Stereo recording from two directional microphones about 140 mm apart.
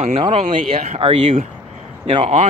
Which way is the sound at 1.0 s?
40° right (ahead or behind).